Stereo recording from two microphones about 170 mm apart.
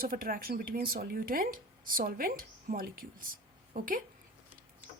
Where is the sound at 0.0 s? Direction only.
55° right (ahead or behind).